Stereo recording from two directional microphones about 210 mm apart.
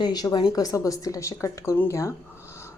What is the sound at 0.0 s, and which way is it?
A woman's voice, 20° left (ahead or behind).